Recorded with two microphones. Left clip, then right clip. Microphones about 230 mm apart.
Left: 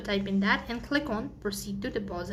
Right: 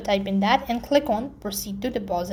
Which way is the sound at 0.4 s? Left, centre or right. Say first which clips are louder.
Right 8 dB; centre.